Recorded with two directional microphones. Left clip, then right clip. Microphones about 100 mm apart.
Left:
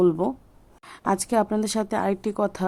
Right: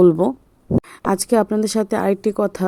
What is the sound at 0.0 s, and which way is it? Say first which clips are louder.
Speech: right 7 dB; 60° right (ahead or behind).